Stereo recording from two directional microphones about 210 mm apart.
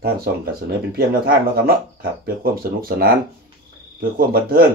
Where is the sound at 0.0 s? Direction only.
45° right (ahead or behind).